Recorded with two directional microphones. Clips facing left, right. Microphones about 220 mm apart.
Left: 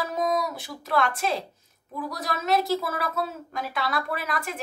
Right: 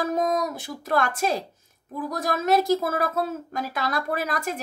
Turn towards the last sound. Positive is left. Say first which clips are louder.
# right 3 dB
turn(degrees=-45)  # may be behind; listen again after turning